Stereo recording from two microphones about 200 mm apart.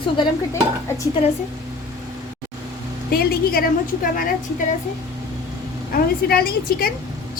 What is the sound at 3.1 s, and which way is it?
A woman's voice, 50° left (ahead or behind).